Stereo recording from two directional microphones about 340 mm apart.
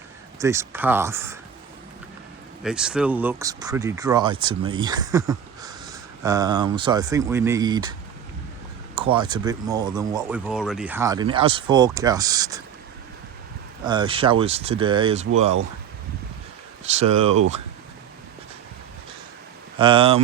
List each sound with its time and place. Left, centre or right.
0.3 s speech: centre
2.6 s speech: centre
9.0 s speech: centre
13.8 s speech: centre
16.8 s speech: centre
19.8 s speech: centre